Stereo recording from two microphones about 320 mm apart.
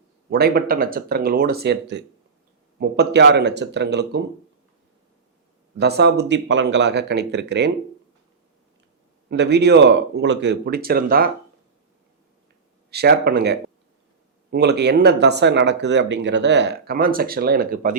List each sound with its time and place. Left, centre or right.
0.3 s speech: right
5.7 s speech: right
9.3 s speech: right
12.9 s speech: right